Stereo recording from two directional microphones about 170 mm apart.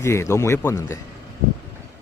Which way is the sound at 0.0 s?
15° left (ahead or behind).